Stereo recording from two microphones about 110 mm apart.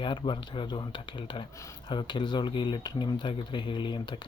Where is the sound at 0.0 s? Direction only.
45° left (ahead or behind).